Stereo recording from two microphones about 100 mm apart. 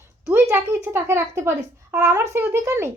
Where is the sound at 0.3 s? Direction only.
20° right (ahead or behind).